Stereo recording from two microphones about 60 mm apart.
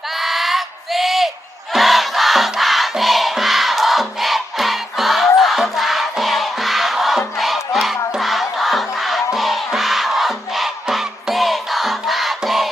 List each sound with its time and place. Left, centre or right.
0.1 s a sound: centre
1.7 s music: centre
8.2 s crowd: centre